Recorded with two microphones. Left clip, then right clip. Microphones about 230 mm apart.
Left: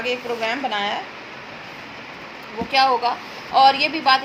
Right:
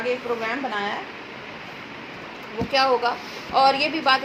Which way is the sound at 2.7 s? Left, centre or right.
Left.